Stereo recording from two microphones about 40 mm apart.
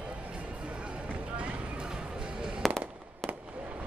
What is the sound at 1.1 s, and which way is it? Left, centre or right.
Run, right.